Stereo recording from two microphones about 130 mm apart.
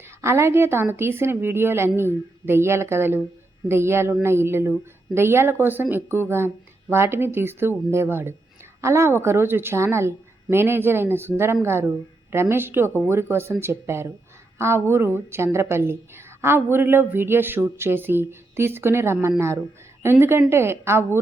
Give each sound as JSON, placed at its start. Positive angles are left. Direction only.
{"t": 0.2, "sound": "a woman's voice", "side_deg": -20}